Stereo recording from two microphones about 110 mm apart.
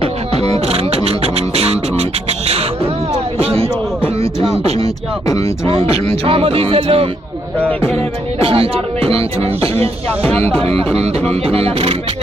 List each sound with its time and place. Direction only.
0.7 s beatboxing: 65° right (ahead or behind)
3.4 s music: 60° right (ahead or behind)
5.7 s speech: 60° right (ahead or behind)
8.4 s speech: 60° right (ahead or behind)
11.4 s speech: 60° right (ahead or behind)